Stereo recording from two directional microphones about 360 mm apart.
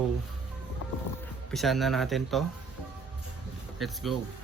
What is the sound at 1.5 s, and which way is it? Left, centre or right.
Speech, centre.